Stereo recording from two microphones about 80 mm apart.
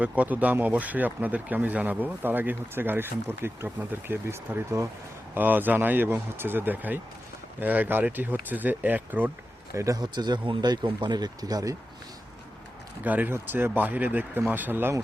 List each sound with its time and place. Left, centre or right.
0.0 s speech: centre
9.7 s speech: right
10.0 s speech: right
13.1 s speech: right